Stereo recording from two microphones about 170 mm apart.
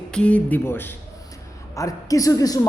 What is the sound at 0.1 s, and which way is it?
A man's voice, 5° left (ahead or behind).